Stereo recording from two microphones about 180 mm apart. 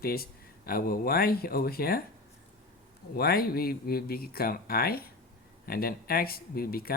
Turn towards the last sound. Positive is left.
turn(degrees=55)  # may be behind; listen again after turning